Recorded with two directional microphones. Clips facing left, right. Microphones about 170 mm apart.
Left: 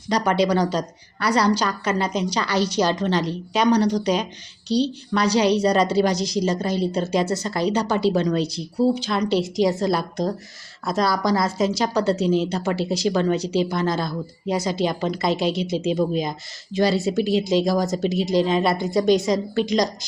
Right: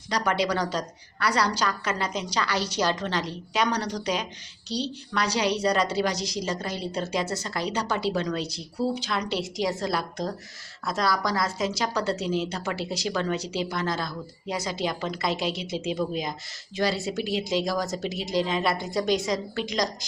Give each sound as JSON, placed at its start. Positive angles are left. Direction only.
{"t": 0.1, "sound": "a woman's voice", "side_deg": 25}